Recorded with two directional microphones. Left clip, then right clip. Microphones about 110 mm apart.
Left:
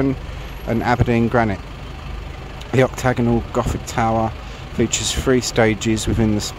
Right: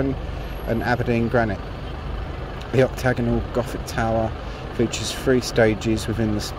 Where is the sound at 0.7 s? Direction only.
45° left (ahead or behind).